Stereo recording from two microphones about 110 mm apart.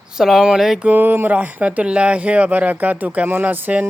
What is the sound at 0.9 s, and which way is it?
Speech, 15° right (ahead or behind).